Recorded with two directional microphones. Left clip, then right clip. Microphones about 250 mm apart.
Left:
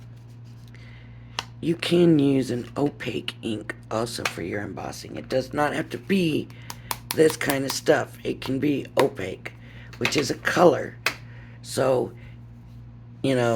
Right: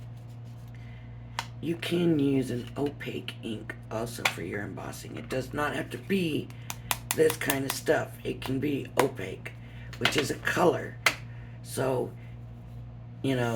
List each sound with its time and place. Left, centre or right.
1.6 s speech: left
13.2 s speech: left